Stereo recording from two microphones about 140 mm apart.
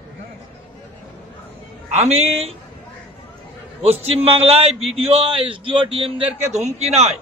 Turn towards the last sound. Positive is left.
turn(degrees=-50)  # may be behind; listen again after turning